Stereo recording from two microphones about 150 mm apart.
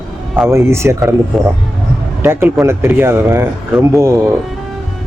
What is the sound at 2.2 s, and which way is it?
Speech, 15° right (ahead or behind).